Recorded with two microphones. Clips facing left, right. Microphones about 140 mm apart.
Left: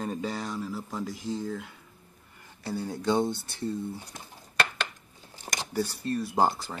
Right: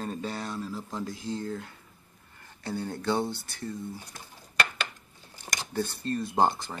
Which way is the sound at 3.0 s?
20° left (ahead or behind).